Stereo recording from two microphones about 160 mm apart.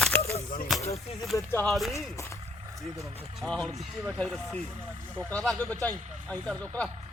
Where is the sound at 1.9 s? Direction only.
20° left (ahead or behind).